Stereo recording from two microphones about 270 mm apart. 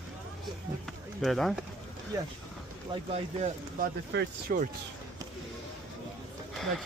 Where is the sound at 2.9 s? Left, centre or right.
Right.